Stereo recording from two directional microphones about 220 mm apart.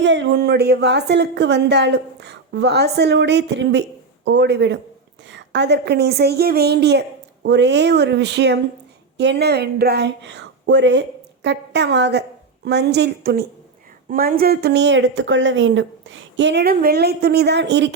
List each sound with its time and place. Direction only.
0.0 s speech: 55° right (ahead or behind)